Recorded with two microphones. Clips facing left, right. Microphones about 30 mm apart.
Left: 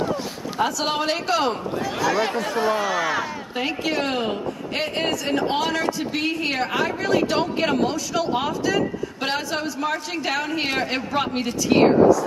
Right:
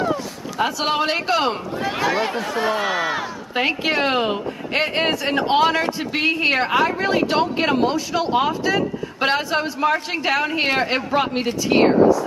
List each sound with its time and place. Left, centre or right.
0.0 s a man's voice: right